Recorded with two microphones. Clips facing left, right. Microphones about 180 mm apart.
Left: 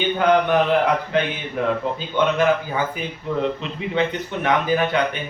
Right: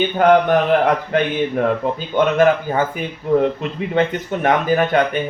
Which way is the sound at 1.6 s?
50° right (ahead or behind).